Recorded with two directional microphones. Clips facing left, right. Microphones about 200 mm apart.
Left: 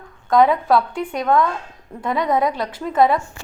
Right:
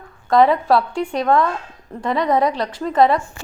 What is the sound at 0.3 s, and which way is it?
A woman's voice, centre (ahead or behind).